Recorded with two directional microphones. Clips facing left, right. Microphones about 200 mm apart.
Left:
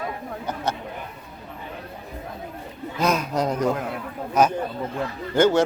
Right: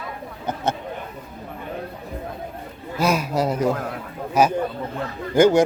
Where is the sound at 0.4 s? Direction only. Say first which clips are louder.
Right 3 dB; 25° right (ahead or behind).